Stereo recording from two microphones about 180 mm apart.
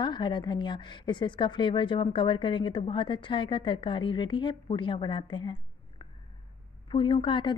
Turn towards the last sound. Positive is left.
turn(degrees=30)  # may be behind; listen again after turning